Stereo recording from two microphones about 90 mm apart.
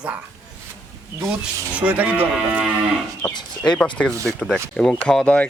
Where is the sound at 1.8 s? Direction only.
15° right (ahead or behind).